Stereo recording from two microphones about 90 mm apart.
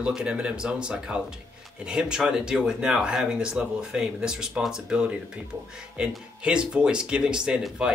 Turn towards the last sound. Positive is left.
turn(degrees=-10)  # may be behind; listen again after turning